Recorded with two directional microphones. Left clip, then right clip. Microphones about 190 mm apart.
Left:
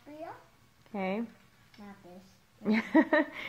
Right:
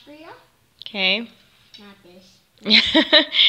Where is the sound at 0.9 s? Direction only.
20° right (ahead or behind).